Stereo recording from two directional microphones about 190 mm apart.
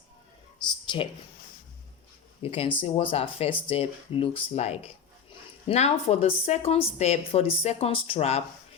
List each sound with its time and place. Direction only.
2.4 s a woman's voice: 30° left (ahead or behind)